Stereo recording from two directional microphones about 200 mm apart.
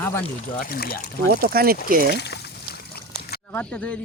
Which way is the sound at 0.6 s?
50° left (ahead or behind).